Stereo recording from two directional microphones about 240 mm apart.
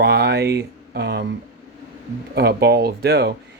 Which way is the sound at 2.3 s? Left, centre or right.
Right.